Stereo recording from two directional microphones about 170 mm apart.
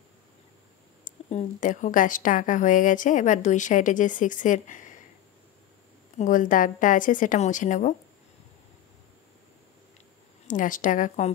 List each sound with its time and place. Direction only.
1.0 s a woman's voice: 50° left (ahead or behind)
6.1 s a woman's voice: 50° left (ahead or behind)
10.4 s a woman's voice: 50° left (ahead or behind)